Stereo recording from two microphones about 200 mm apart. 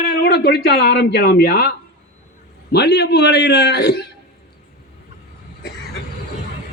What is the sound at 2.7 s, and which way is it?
A man's voice, 55° left (ahead or behind).